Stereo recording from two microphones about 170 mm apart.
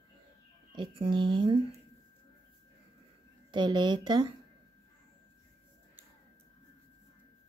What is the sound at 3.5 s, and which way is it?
Speech, 25° right (ahead or behind).